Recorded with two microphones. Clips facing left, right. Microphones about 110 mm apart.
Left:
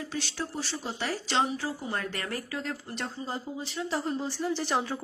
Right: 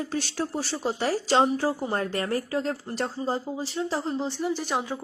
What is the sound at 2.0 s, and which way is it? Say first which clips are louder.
Speech: right 7 dB; 30° right (ahead or behind).